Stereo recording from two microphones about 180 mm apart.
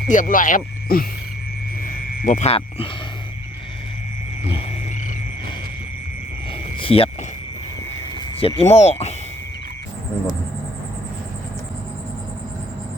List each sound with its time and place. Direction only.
0.1 s frog: 45° left (ahead or behind)
1.8 s a sound: 45° left (ahead or behind)
6.5 s cricket: 30° left (ahead or behind)
8.4 s speech: 30° left (ahead or behind)